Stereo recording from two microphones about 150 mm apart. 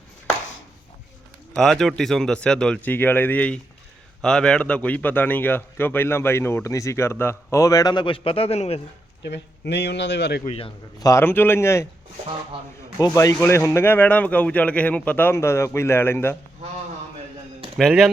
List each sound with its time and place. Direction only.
1.5 s speech: 5° left (ahead or behind); by 8.8 s 45° left (ahead or behind)
10.4 s a man's voice: 45° left (ahead or behind)
11.0 s speech: 20° left (ahead or behind)
13.0 s speech: 20° left (ahead or behind)
17.7 s speech: centre (ahead or behind)